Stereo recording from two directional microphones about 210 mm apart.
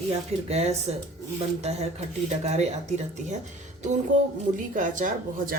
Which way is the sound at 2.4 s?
30° right (ahead or behind).